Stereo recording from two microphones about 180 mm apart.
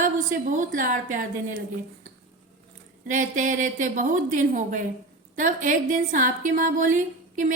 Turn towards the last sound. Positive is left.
turn(degrees=-45)  # may be behind; listen again after turning